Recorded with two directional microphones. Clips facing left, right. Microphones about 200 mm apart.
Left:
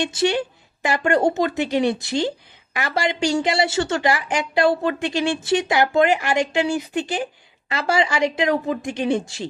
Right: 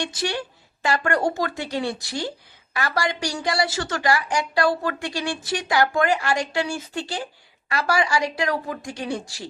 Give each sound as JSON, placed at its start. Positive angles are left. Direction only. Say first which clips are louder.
{"t": 0.0, "sound": "speech", "louder": "left 7 dB", "side_deg": 25}